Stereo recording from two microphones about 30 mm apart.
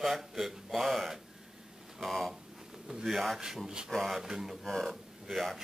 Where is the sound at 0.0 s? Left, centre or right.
Centre.